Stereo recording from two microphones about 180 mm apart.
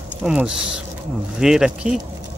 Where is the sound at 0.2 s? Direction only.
5° right (ahead or behind).